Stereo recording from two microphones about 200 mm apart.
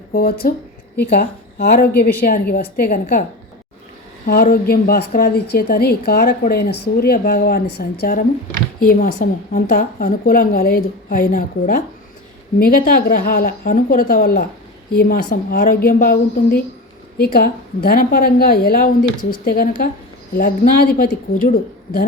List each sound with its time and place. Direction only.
0.1 s a woman's voice: 50° left (ahead or behind)
4.3 s a woman's voice: 45° left (ahead or behind)